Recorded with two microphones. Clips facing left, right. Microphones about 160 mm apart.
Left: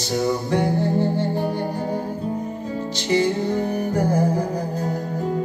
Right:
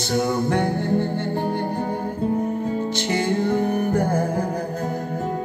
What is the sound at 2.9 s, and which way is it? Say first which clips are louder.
Music: left 6 dB; 55° right (ahead or behind).